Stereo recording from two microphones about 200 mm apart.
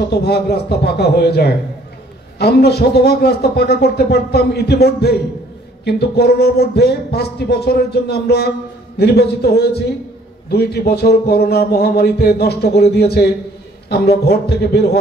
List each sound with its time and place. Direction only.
0.0 s a man's voice: 55° left (ahead or behind)